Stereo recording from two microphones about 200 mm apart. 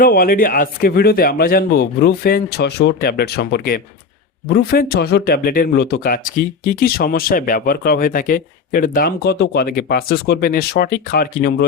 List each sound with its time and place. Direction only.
0.0 s speech: 50° left (ahead or behind)